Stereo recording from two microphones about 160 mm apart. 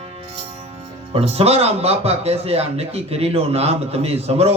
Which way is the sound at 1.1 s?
40° right (ahead or behind).